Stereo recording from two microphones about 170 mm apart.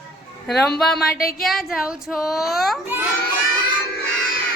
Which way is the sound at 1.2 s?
60° left (ahead or behind).